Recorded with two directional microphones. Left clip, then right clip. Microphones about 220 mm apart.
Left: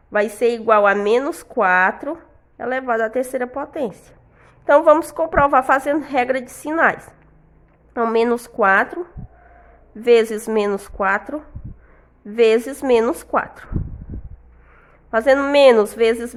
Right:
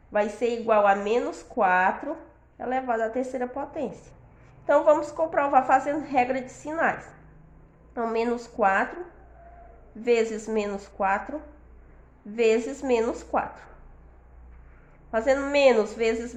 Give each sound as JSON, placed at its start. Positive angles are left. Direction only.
{"t": 0.1, "sound": "a woman's voice", "side_deg": 45}
{"t": 10.0, "sound": "a woman's voice", "side_deg": 45}
{"t": 15.1, "sound": "a woman's voice", "side_deg": 40}